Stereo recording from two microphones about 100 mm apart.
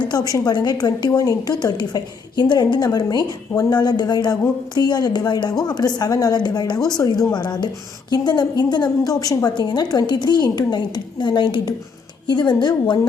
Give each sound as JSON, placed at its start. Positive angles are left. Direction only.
{"t": 0.1, "sound": "a woman's voice", "side_deg": 40}